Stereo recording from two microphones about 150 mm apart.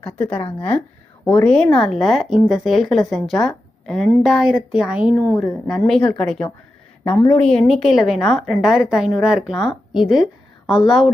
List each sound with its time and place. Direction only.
0.0 s speech: 10° left (ahead or behind)
7.1 s a woman's voice: 30° left (ahead or behind)
7.3 s speech: 5° left (ahead or behind)